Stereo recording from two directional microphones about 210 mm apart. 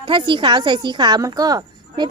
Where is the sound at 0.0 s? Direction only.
25° right (ahead or behind).